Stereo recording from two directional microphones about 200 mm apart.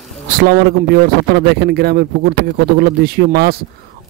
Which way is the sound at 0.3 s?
50° right (ahead or behind).